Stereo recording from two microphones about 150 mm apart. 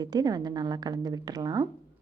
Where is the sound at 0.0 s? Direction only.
25° right (ahead or behind).